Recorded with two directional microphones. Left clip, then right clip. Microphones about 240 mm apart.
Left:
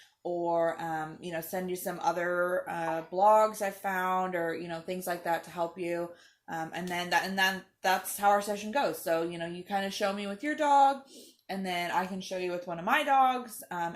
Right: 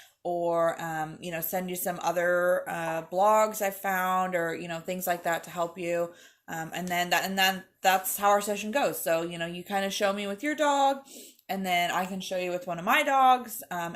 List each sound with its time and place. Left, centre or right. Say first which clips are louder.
0.4 s speech: right 2 dB; right